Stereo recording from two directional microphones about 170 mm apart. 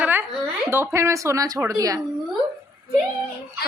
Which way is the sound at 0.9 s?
15° right (ahead or behind).